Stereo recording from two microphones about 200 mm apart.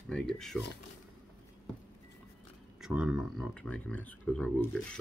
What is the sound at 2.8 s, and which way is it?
Speech, 5° right (ahead or behind).